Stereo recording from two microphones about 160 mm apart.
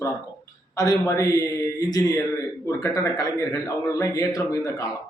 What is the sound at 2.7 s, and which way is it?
A man's voice, 20° left (ahead or behind).